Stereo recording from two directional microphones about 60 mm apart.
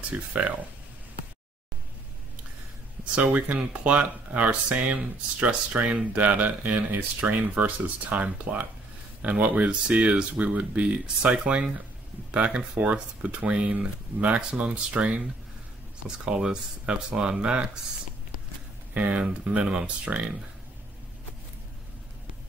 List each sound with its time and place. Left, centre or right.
0.1 s speech: right
3.2 s speech: right
16.3 s speech: centre
18.9 s speech: right